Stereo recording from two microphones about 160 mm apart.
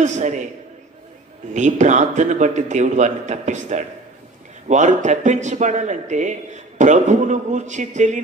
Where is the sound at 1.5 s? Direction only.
50° right (ahead or behind).